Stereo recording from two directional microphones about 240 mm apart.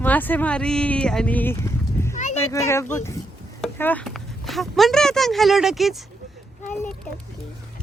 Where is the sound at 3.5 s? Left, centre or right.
Centre.